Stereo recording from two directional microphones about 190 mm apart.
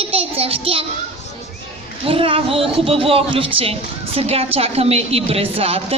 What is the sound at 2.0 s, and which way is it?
A woman's voice, 30° right (ahead or behind).